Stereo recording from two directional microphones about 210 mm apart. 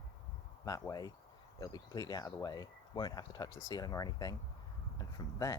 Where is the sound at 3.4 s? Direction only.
65° left (ahead or behind).